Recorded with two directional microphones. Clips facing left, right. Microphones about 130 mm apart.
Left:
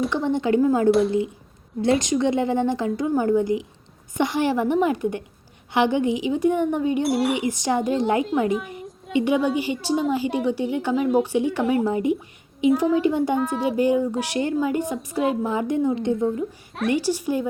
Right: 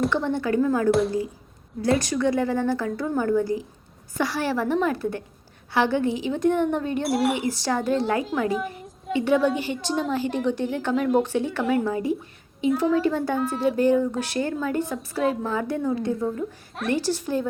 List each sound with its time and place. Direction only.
0.1 s a woman's voice: 20° left (ahead or behind)
0.9 s a child's voice: centre (ahead or behind)
1.8 s a woman's voice: 20° left (ahead or behind)
7.0 s a child's voice: centre (ahead or behind)
7.3 s a woman's voice: 15° left (ahead or behind)
8.5 s a sound: centre (ahead or behind)
9.1 s a woman's voice: 15° left (ahead or behind)
11.3 s a woman's voice: 15° left (ahead or behind)